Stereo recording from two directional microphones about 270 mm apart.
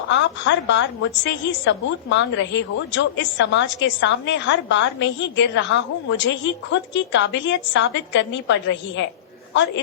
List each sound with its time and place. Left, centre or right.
0.1 s a woman's voice: left